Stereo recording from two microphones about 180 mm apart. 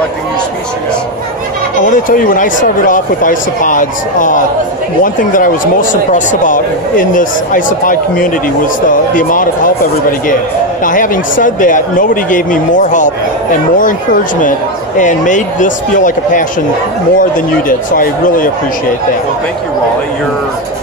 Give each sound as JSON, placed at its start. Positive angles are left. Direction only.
{"t": 1.9, "sound": "speech", "side_deg": 50}
{"t": 10.8, "sound": "speech", "side_deg": 45}
{"t": 15.0, "sound": "speech", "side_deg": 45}